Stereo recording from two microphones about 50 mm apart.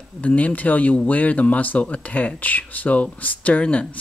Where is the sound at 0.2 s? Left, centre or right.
Left.